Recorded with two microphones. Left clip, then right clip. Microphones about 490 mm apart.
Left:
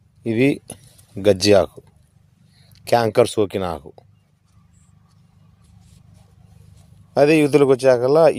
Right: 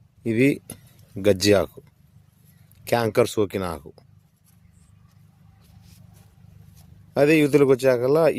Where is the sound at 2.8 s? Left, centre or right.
Right.